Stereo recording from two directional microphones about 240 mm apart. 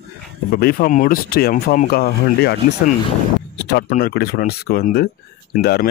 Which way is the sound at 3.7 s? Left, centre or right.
Left.